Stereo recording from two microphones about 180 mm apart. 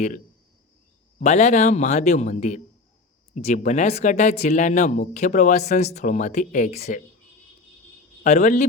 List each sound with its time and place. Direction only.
1.2 s speech: 40° left (ahead or behind)
8.2 s a man's voice: 40° left (ahead or behind)